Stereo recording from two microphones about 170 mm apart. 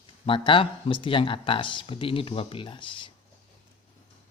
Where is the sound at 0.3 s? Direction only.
30° left (ahead or behind).